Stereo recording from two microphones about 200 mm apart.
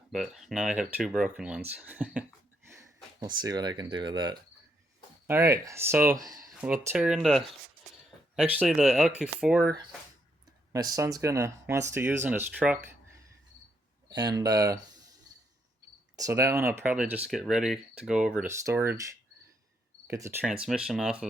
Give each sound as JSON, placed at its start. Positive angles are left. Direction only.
{"t": 0.1, "sound": "speech", "side_deg": 0}
{"t": 10.7, "sound": "speech", "side_deg": -20}
{"t": 14.1, "sound": "speech", "side_deg": -20}
{"t": 20.1, "sound": "speech", "side_deg": -15}